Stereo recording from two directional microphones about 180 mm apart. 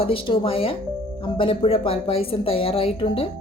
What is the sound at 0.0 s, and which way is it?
Speech, 30° left (ahead or behind).